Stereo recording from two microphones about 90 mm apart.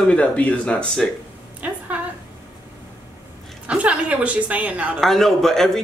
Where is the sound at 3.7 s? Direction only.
15° right (ahead or behind).